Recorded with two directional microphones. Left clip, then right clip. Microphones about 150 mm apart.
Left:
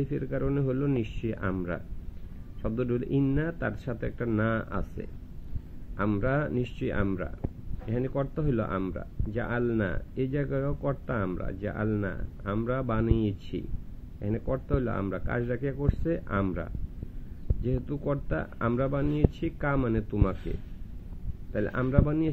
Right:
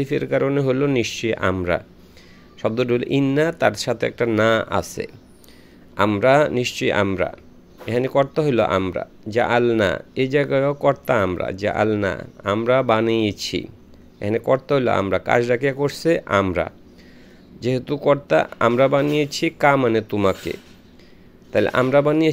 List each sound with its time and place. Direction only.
0.0 s speech: 30° right (ahead or behind)
6.2 s speech: 30° right (ahead or behind)
17.6 s speech: 30° right (ahead or behind)
21.5 s speech: 35° right (ahead or behind)